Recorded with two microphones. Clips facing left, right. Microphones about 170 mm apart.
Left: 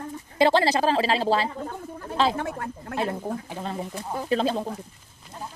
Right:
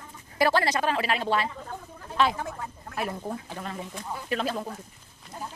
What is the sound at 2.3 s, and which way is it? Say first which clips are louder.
Speech: left 5 dB; 65° left (ahead or behind).